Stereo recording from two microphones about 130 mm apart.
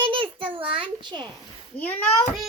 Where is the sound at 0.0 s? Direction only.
40° right (ahead or behind).